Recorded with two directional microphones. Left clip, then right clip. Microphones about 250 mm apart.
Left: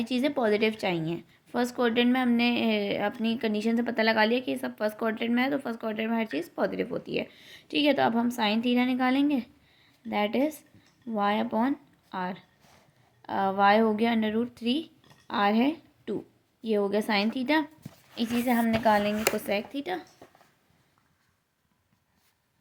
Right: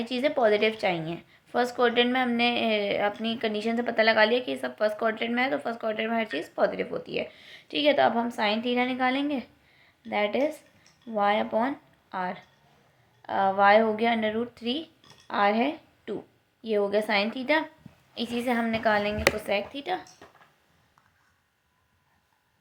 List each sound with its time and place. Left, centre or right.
0.0 s a woman's voice: left